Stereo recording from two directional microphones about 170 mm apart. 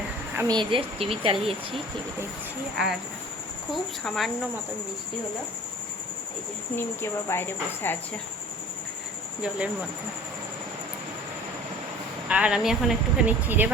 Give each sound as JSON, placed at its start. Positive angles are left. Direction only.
{"t": 0.3, "sound": "speech", "side_deg": -25}
{"t": 2.7, "sound": "speech", "side_deg": 0}
{"t": 6.7, "sound": "speech", "side_deg": 15}
{"t": 12.3, "sound": "speech", "side_deg": -5}